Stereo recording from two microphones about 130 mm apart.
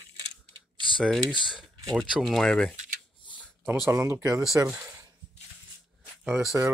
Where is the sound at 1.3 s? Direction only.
40° left (ahead or behind).